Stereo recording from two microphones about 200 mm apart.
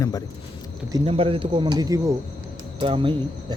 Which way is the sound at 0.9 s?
30° right (ahead or behind).